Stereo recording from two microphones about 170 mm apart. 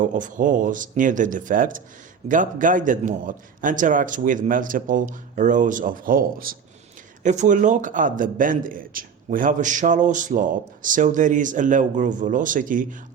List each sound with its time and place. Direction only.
0.0 s a man's voice: 50° right (ahead or behind)
7.2 s a man's voice: 45° right (ahead or behind)